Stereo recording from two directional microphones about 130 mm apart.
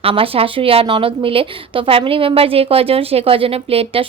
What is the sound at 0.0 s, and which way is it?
A woman's voice, 45° right (ahead or behind).